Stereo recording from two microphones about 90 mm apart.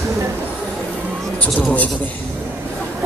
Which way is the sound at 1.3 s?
15° left (ahead or behind).